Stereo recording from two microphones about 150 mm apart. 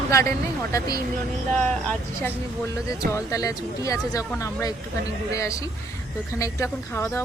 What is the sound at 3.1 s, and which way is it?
Speech, 20° left (ahead or behind).